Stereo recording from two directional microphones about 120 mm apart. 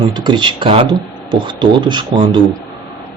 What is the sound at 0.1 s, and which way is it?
Speech, 40° right (ahead or behind).